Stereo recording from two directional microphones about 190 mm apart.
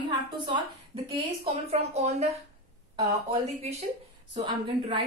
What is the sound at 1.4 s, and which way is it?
Speech, 35° right (ahead or behind).